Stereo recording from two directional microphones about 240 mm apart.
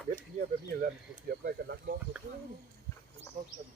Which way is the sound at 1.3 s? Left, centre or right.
Right.